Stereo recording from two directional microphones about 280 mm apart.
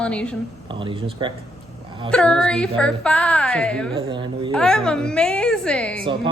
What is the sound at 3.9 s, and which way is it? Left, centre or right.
Speech, centre.